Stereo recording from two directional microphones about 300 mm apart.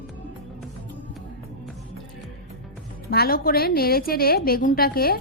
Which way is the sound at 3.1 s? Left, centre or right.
Left.